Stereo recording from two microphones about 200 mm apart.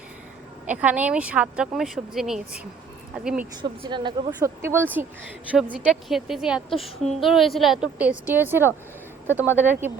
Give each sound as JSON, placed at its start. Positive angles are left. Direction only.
{"t": 0.7, "sound": "speech", "side_deg": -10}
{"t": 3.6, "sound": "speech", "side_deg": -25}
{"t": 4.4, "sound": "speech", "side_deg": -10}
{"t": 9.3, "sound": "speech", "side_deg": 10}
{"t": 9.6, "sound": "speech", "side_deg": -10}